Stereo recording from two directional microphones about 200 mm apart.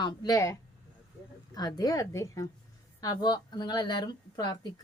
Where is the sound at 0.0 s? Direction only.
20° left (ahead or behind).